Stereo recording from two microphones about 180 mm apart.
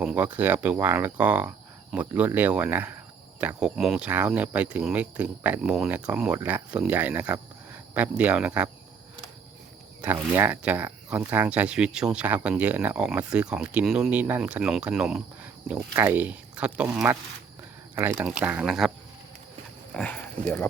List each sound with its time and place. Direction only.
0.0 s speech: 5° right (ahead or behind)
10.0 s speech: 10° right (ahead or behind)
16.9 s speech: 15° right (ahead or behind)
19.9 s speech: 10° left (ahead or behind)